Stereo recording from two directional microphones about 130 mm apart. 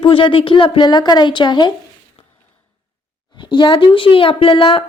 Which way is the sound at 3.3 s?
35° left (ahead or behind).